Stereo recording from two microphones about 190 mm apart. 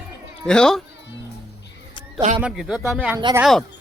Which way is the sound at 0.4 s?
5° left (ahead or behind).